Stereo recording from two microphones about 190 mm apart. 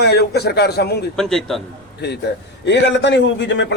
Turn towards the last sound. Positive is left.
turn(degrees=75)  # may be behind; listen again after turning